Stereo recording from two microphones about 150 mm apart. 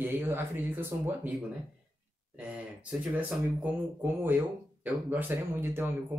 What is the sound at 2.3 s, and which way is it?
Speech, 10° right (ahead or behind).